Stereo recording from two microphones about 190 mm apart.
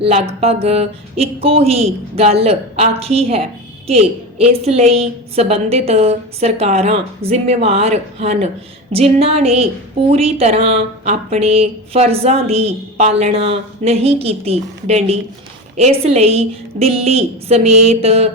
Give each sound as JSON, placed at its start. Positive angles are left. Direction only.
{"t": 0.0, "sound": "speech", "side_deg": -30}